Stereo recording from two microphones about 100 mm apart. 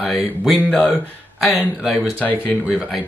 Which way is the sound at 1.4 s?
Centre (ahead or behind).